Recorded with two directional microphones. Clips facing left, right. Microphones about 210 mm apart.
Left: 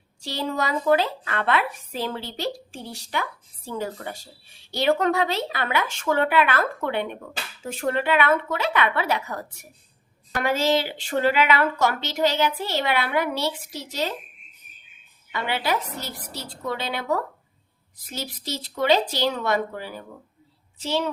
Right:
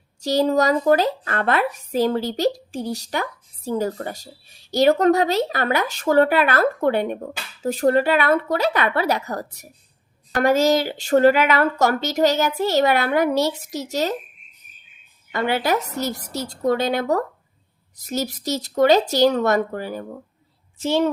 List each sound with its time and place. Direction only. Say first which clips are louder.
0.2 s a woman's voice: right 9 dB; 40° right (ahead or behind)
15.3 s a woman's voice: right 5 dB; 45° right (ahead or behind)